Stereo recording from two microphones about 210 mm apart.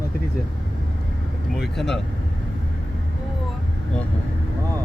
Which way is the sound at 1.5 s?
Centre (ahead or behind).